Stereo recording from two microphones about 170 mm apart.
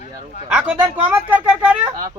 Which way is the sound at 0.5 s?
10° right (ahead or behind).